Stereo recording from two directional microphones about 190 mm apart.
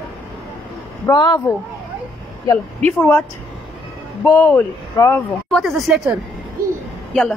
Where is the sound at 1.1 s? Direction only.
20° left (ahead or behind).